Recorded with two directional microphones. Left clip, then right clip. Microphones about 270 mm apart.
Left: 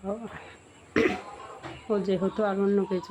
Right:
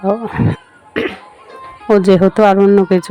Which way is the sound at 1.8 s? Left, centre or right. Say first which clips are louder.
Right 17 dB; right.